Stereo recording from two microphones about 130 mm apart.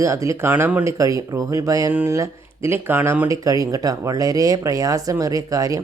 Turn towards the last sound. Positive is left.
turn(degrees=-25)  # may be behind; listen again after turning